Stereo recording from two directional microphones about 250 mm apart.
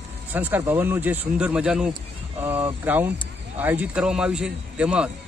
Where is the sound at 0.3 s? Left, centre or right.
Centre.